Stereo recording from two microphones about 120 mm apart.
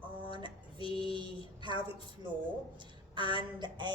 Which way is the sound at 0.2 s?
40° right (ahead or behind).